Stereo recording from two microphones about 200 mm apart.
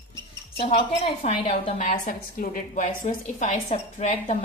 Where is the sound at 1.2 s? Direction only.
30° left (ahead or behind).